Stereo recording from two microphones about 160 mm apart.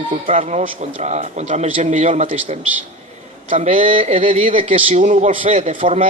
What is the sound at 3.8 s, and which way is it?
A man's voice, 35° right (ahead or behind).